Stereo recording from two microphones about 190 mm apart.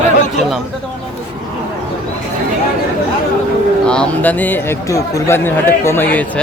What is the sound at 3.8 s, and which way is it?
Speech, 5° left (ahead or behind).